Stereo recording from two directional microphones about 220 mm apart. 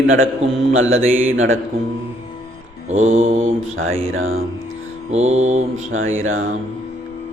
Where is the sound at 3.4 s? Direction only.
65° right (ahead or behind).